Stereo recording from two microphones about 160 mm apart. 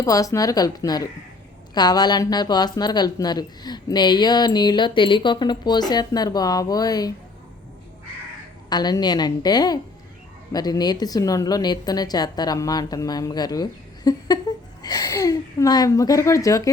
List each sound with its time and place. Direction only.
0.0 s speech: 20° left (ahead or behind)
8.7 s speech: 25° left (ahead or behind)